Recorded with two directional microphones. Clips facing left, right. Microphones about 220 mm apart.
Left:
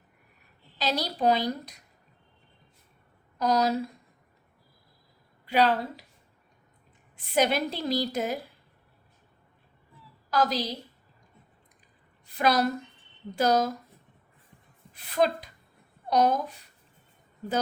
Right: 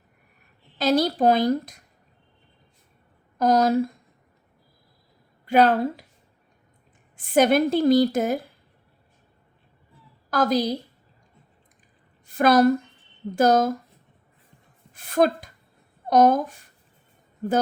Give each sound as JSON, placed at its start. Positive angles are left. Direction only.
{"t": 0.8, "sound": "a woman's voice", "side_deg": -45}
{"t": 3.3, "sound": "a woman's voice", "side_deg": -50}
{"t": 5.5, "sound": "a woman's voice", "side_deg": -50}
{"t": 7.2, "sound": "a woman's voice", "side_deg": -50}
{"t": 10.2, "sound": "a woman's voice", "side_deg": -50}
{"t": 12.2, "sound": "a woman's voice", "side_deg": -50}
{"t": 14.9, "sound": "a woman's voice", "side_deg": -45}